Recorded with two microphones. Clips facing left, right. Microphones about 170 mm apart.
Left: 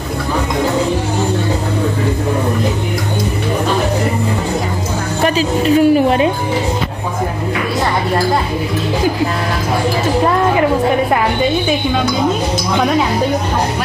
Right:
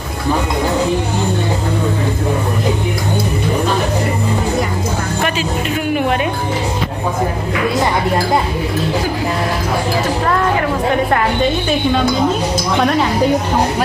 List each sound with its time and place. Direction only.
5.2 s speech: 35° left (ahead or behind)